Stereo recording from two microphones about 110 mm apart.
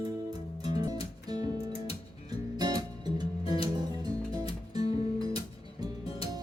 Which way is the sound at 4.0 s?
40° right (ahead or behind).